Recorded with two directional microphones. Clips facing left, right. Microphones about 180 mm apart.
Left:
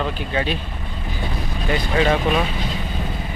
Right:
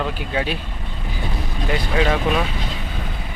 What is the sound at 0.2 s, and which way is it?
Speech, 10° right (ahead or behind).